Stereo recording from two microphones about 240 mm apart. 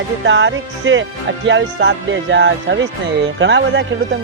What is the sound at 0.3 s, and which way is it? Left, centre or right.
Speech, right.